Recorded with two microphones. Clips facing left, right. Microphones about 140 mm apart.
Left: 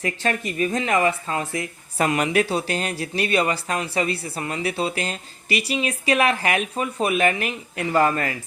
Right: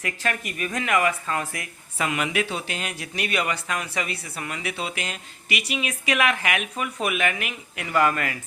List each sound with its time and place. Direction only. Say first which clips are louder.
0.0 s speech: left 4 dB; 30° left (ahead or behind)
2.0 s speech: left 5 dB; 40° left (ahead or behind)